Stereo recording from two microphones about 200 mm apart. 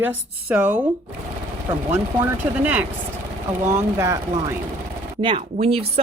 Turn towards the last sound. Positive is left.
turn(degrees=-30)  # may be behind; listen again after turning